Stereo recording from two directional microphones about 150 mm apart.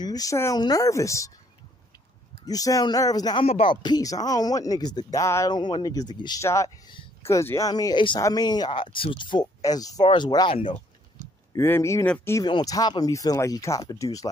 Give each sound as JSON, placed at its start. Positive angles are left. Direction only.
{"t": 0.0, "sound": "speech", "side_deg": 25}
{"t": 2.4, "sound": "speech", "side_deg": 25}
{"t": 3.4, "sound": "speech", "side_deg": 35}
{"t": 11.2, "sound": "a sound", "side_deg": -55}
{"t": 11.5, "sound": "speech", "side_deg": 15}
{"t": 12.4, "sound": "speech", "side_deg": 25}